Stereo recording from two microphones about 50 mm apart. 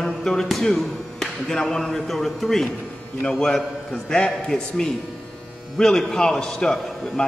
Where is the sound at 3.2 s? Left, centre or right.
Centre.